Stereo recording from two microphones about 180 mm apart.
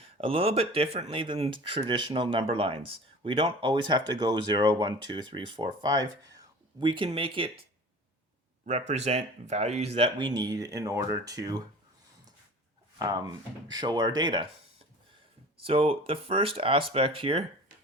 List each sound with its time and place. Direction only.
0.0 s speech: 30° right (ahead or behind)
8.6 s speech: 40° right (ahead or behind); by 11.6 s 20° right (ahead or behind)
13.0 s speech: 25° right (ahead or behind)
15.6 s speech: 30° right (ahead or behind)